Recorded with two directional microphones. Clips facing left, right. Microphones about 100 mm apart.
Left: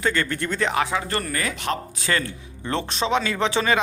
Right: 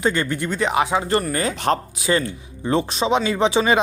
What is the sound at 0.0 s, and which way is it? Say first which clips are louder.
A man's voice: right 3 dB; 15° right (ahead or behind).